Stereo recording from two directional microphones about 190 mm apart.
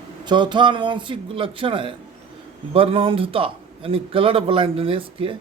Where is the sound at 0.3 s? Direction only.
25° right (ahead or behind).